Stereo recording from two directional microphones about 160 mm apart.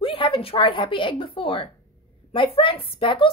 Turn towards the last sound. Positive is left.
turn(degrees=35)  # may be behind; listen again after turning